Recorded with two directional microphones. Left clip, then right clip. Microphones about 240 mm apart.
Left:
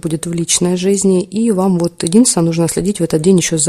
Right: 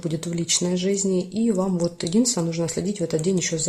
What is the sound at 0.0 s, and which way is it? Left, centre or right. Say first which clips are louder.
Speech: left 8 dB; left.